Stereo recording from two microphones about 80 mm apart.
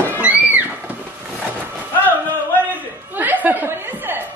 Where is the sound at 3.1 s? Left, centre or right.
Right.